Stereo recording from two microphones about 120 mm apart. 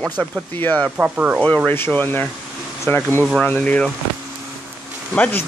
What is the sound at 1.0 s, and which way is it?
Speech, 10° right (ahead or behind).